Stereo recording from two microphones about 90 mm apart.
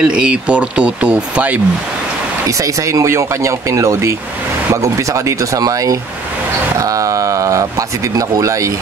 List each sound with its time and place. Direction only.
0.0 s speech: 10° right (ahead or behind)
2.4 s speech: 35° right (ahead or behind)